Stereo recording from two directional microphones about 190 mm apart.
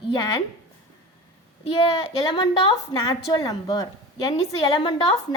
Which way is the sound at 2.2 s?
25° left (ahead or behind).